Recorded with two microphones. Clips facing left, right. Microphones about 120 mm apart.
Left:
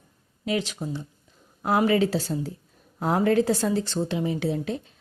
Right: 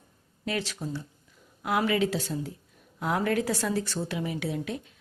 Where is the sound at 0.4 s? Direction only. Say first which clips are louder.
Left 4 dB; 15° left (ahead or behind).